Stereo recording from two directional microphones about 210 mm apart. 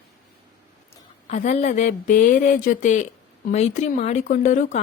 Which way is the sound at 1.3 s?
35° left (ahead or behind).